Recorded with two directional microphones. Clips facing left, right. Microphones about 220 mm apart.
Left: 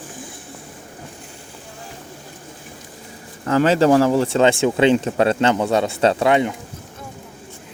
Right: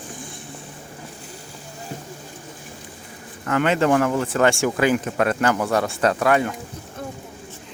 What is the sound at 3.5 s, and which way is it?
Speech, 35° left (ahead or behind).